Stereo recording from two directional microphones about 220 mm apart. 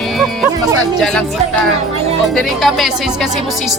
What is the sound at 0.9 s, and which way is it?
Speech, centre (ahead or behind).